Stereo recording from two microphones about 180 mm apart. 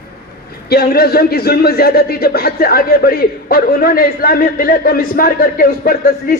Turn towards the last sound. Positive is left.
turn(degrees=50)  # may be behind; listen again after turning